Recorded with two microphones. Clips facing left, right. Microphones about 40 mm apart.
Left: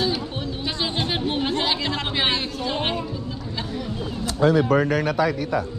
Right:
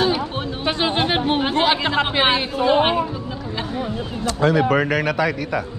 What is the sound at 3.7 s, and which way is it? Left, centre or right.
Speech, right.